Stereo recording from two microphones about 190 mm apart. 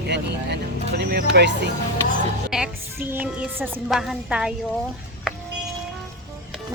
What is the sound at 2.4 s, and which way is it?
A woman's voice, 5° right (ahead or behind).